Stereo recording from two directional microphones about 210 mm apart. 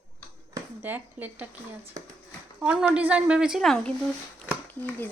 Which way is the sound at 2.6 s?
5° right (ahead or behind).